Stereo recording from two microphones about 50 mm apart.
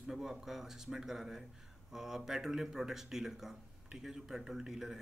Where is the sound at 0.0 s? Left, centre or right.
Centre.